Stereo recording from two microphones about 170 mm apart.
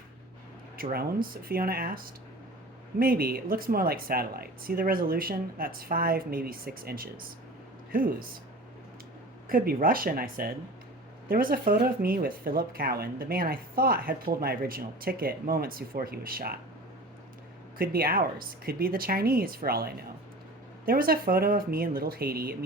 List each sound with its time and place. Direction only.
0.8 s speech: 60° right (ahead or behind)
9.5 s speech: 60° right (ahead or behind)
17.7 s speech: 60° right (ahead or behind)